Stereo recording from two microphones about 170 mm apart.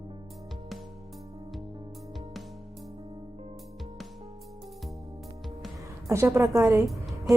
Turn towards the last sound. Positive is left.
turn(degrees=0)  # may be behind; listen again after turning